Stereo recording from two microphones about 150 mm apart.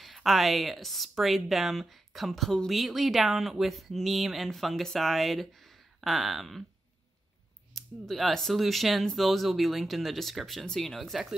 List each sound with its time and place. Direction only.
0.0 s speech: centre (ahead or behind)
7.7 s speech: centre (ahead or behind)